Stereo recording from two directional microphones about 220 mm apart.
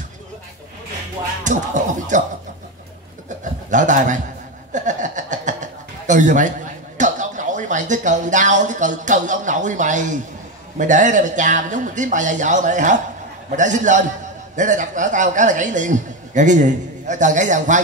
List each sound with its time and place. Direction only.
1.4 s speech: 35° right (ahead or behind)
3.7 s speech: 35° right (ahead or behind)
4.7 s chuckle: 35° right (ahead or behind)
10.8 s speech: 35° right (ahead or behind)